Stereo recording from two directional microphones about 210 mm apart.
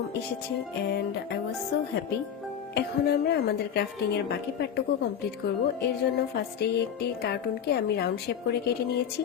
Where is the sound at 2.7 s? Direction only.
50° left (ahead or behind).